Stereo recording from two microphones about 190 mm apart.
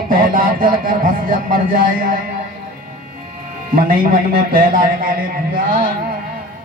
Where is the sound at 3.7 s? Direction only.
50° right (ahead or behind).